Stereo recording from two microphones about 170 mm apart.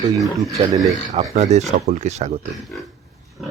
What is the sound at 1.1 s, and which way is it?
Speech, 40° right (ahead or behind).